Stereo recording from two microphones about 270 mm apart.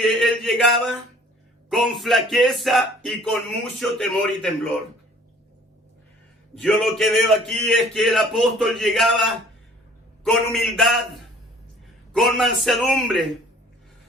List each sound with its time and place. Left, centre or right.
0.0 s a sound: centre
1.7 s a man's voice: centre
6.6 s a man's voice: centre